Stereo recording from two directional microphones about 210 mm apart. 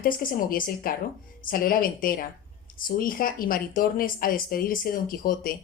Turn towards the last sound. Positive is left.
turn(degrees=45)  # may be behind; listen again after turning